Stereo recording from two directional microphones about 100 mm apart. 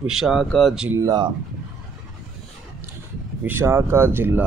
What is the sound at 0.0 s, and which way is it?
Speech, 5° right (ahead or behind).